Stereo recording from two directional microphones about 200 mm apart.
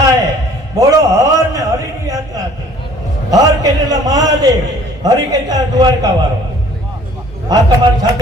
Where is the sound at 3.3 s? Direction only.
20° right (ahead or behind).